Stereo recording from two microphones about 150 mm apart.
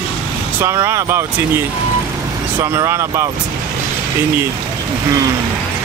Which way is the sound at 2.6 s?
15° right (ahead or behind).